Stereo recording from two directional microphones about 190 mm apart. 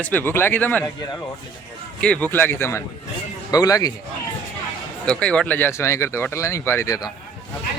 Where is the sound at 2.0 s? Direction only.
5° left (ahead or behind).